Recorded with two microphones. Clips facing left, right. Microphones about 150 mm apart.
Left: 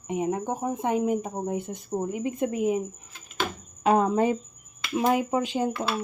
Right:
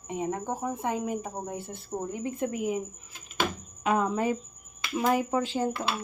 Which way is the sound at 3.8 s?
30° left (ahead or behind).